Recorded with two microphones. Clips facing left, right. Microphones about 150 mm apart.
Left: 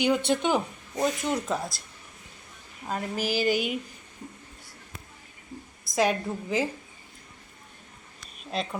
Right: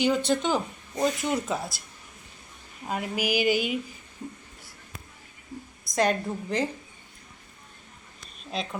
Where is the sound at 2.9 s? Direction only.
10° right (ahead or behind).